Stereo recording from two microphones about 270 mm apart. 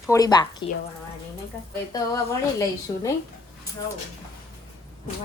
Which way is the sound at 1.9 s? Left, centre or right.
Centre.